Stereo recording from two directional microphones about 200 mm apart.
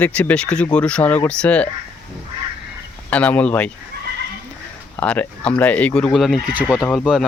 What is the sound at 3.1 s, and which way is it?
Speech, 5° left (ahead or behind).